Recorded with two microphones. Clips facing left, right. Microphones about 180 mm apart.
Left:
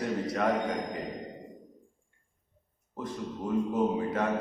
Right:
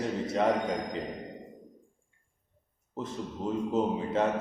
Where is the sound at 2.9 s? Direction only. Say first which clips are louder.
Even; 25° right (ahead or behind).